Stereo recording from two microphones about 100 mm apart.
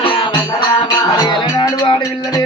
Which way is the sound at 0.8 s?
45° left (ahead or behind).